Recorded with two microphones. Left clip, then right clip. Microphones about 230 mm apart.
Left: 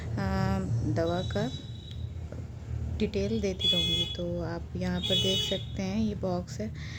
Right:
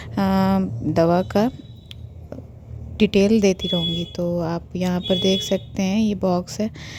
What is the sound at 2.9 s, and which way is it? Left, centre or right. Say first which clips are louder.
A woman's voice: right 13 dB; right.